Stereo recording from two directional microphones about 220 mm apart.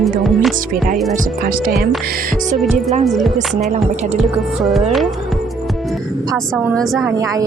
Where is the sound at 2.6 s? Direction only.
Centre (ahead or behind).